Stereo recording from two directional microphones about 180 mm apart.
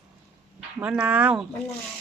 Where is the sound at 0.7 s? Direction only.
5° right (ahead or behind).